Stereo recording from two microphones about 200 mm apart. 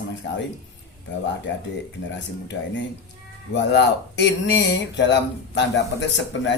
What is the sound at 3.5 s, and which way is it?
A man's voice, 60° left (ahead or behind).